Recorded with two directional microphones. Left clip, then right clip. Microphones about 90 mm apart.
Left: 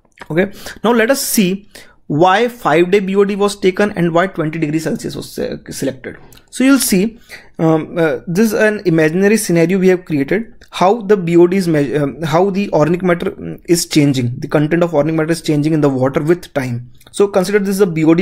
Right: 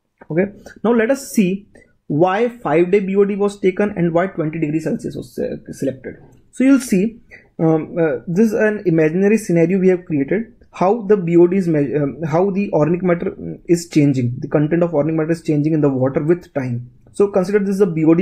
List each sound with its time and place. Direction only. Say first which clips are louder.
0.8 s a woman's voice: left 3 dB; 30° left (ahead or behind)
6.7 s speech: left 2 dB; 15° left (ahead or behind)
7.5 s speech: left 3 dB; 25° left (ahead or behind)
13.7 s speech: left 3 dB; 15° left (ahead or behind)